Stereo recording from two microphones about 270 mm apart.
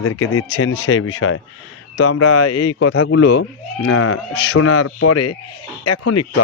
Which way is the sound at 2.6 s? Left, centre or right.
Left.